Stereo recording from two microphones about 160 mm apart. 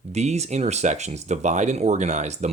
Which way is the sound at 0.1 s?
45° right (ahead or behind).